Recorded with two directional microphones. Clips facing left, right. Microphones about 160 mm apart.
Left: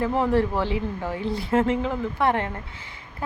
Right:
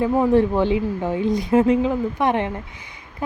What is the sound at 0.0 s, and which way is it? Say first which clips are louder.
Speech: right 5 dB; 15° right (ahead or behind).